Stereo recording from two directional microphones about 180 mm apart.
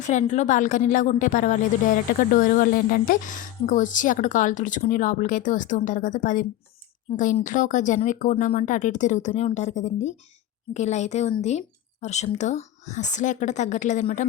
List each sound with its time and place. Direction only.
0.0 s speech: 40° left (ahead or behind)
7.4 s a woman's voice: 45° left (ahead or behind)